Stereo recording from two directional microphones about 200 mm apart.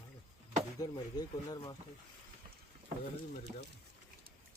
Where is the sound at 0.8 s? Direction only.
20° left (ahead or behind).